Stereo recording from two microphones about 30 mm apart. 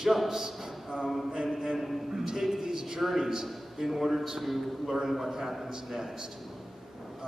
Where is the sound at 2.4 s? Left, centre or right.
Centre.